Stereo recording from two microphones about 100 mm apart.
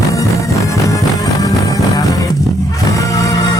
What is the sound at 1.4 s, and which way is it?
Music, 35° left (ahead or behind).